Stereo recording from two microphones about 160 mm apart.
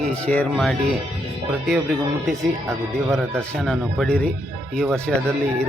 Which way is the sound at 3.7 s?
5° left (ahead or behind).